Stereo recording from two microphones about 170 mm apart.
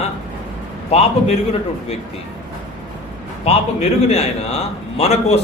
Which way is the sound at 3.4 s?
40° left (ahead or behind).